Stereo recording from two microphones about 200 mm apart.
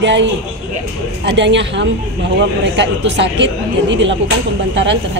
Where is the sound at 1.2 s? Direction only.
65° right (ahead or behind).